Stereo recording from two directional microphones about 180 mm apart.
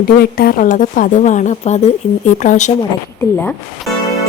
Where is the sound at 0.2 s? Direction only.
55° left (ahead or behind).